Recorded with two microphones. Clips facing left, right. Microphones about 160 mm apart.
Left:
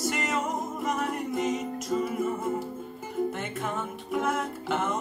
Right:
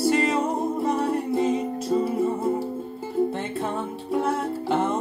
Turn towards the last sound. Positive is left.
turn(degrees=-30)  # may be behind; listen again after turning